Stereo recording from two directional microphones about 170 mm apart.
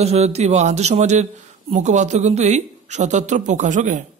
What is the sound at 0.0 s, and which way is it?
A man's voice, 40° right (ahead or behind).